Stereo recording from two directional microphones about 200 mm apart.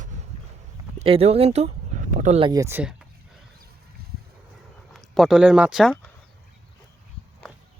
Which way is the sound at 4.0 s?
50° right (ahead or behind).